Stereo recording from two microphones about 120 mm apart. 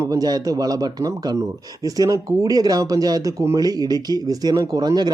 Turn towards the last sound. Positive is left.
turn(degrees=-35)  # may be behind; listen again after turning